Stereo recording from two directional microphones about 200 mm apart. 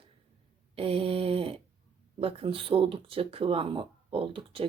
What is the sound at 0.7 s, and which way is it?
Speech, 30° right (ahead or behind).